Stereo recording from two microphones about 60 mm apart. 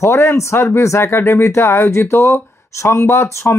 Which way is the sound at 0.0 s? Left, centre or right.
Left.